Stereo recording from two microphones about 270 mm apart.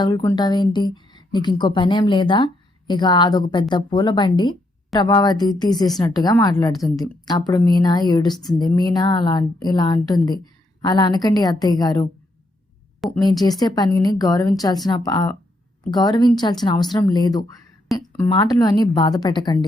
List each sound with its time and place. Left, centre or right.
0.0 s a woman's voice: centre
13.0 s speech: centre
13.4 s a woman's voice: centre